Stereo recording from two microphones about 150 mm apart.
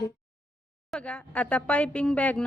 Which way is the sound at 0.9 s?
5° left (ahead or behind).